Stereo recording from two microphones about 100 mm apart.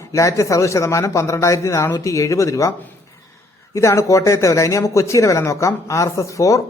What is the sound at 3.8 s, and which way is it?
Speech, 30° left (ahead or behind).